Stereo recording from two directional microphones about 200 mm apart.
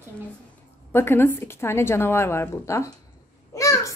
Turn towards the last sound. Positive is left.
turn(degrees=15)  # may be behind; listen again after turning